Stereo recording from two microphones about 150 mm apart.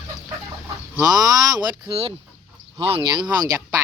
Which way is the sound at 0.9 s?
25° right (ahead or behind).